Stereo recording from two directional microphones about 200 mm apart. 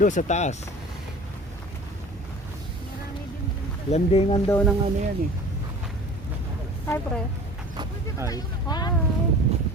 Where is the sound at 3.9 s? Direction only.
30° left (ahead or behind).